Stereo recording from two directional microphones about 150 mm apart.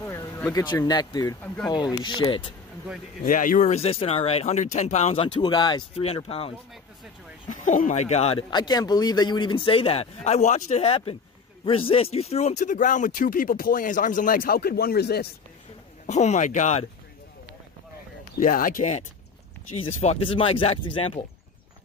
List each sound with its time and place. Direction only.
0.0 s speech: 15° left (ahead or behind); by 2.5 s 30° left (ahead or behind)
3.2 s speech: 65° left (ahead or behind); by 6.0 s 30° left (ahead or behind)
6.0 s a man's voice: 40° left (ahead or behind)
7.4 s speech: 60° left (ahead or behind)
8.5 s a man's voice: 30° left (ahead or behind); by 15.2 s 90° left
16.1 s speech: 50° left (ahead or behind)
18.4 s speech: 65° left (ahead or behind)
19.8 s a man's voice: 40° left (ahead or behind)